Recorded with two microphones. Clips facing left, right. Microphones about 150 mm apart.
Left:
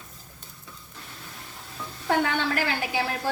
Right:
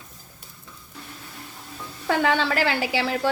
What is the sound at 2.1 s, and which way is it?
A woman's voice, 90° right.